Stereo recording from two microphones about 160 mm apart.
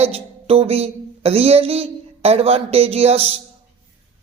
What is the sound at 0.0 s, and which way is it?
A woman's voice, 40° right (ahead or behind).